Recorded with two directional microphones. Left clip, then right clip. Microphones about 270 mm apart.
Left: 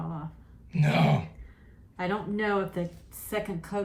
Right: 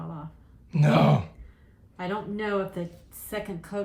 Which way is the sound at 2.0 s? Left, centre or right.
Centre.